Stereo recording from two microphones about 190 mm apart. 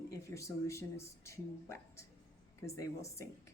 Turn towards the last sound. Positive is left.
turn(degrees=15)  # may be behind; listen again after turning